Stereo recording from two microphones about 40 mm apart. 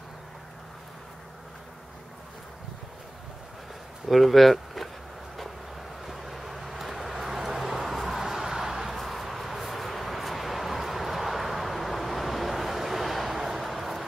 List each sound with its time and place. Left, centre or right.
4.1 s speech: centre
6.0 s vehicle: centre
8.8 s a sound: centre